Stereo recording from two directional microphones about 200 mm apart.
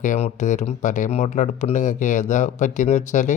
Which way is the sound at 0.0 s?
40° left (ahead or behind).